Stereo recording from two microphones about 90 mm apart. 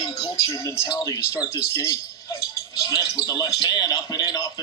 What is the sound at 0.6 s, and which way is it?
A man's voice, 30° left (ahead or behind).